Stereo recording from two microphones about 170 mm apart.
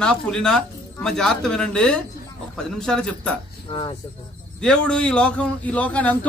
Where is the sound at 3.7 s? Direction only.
30° left (ahead or behind).